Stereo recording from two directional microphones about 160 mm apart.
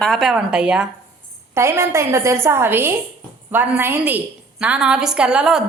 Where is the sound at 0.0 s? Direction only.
Centre (ahead or behind).